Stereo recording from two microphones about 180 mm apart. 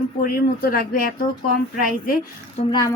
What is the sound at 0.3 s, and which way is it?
Speech, 55° left (ahead or behind).